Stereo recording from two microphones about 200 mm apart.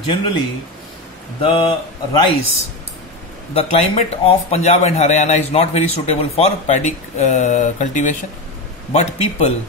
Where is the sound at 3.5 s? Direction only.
30° left (ahead or behind).